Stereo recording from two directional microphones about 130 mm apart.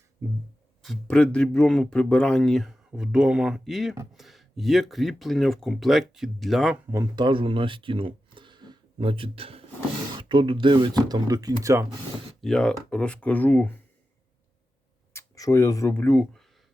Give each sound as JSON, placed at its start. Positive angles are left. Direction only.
{"t": 0.8, "sound": "speech", "side_deg": 5}
{"t": 6.9, "sound": "speech", "side_deg": -30}
{"t": 12.4, "sound": "speech", "side_deg": 5}
{"t": 15.1, "sound": "speech", "side_deg": 25}